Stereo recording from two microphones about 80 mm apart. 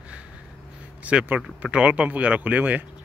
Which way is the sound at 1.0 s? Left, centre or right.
Centre.